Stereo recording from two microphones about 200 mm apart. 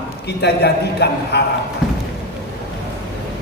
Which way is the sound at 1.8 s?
5° right (ahead or behind).